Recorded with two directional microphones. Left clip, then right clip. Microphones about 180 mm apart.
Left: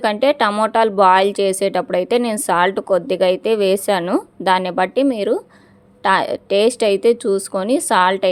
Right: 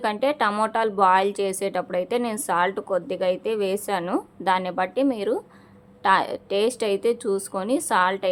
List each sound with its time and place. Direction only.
0.0 s a woman's voice: 30° left (ahead or behind)